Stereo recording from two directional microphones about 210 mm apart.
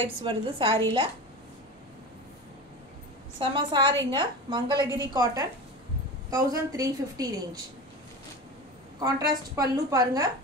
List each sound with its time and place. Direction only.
0.2 s a woman's voice: 25° right (ahead or behind)
3.3 s a woman's voice: 20° right (ahead or behind)
9.0 s a woman's voice: 15° right (ahead or behind)